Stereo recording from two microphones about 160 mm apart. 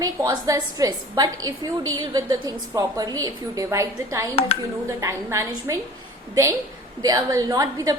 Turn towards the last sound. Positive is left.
turn(degrees=-25)  # may be behind; listen again after turning